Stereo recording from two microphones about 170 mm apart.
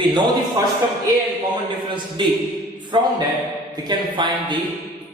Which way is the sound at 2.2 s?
30° right (ahead or behind).